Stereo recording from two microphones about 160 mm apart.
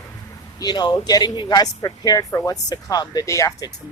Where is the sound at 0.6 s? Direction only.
25° left (ahead or behind).